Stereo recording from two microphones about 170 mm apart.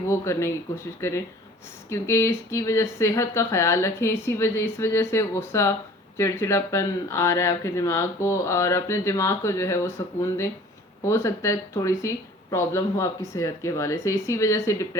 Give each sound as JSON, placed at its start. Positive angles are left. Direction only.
{"t": 0.1, "sound": "speech", "side_deg": 15}